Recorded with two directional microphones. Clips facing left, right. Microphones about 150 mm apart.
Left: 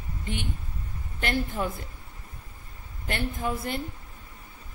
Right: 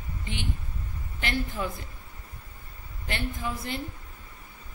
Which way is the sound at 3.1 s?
50° left (ahead or behind).